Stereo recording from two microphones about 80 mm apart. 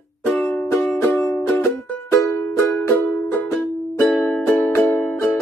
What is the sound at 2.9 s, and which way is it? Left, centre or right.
Music, left.